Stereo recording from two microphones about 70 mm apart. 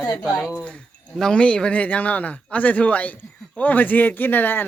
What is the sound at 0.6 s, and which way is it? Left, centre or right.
Speech, centre.